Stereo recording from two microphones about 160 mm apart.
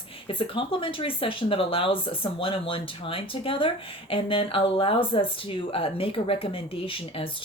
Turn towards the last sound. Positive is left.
turn(degrees=35)  # may be behind; listen again after turning